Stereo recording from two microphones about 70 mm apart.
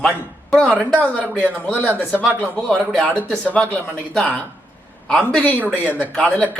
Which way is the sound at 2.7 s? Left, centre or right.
Centre.